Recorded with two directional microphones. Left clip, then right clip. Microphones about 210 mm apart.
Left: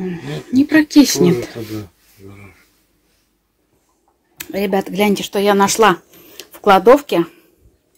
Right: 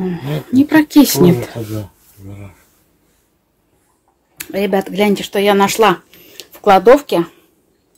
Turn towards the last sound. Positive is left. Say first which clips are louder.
# right 1 dB
turn(degrees=10)  # may be behind; listen again after turning